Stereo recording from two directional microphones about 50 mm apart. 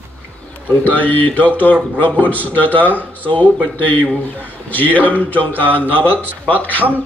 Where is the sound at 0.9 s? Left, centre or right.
Left.